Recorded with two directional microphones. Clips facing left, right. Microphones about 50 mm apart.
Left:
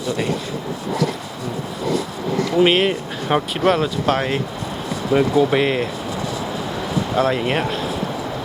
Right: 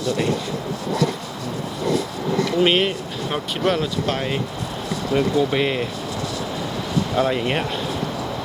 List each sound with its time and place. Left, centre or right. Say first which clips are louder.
2.6 s speech: left 4 dB; centre
3.2 s speech: left 5 dB; left
3.7 s speech: left 4 dB; centre
7.2 s speech: left 3 dB; centre